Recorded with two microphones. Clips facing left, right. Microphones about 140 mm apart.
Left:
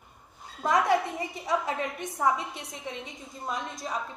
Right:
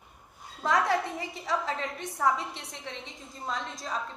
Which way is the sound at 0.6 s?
20° left (ahead or behind).